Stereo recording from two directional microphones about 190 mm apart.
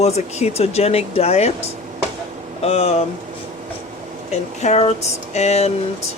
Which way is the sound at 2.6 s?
30° left (ahead or behind).